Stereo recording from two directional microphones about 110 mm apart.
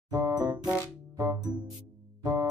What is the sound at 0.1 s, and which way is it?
Music, 35° right (ahead or behind).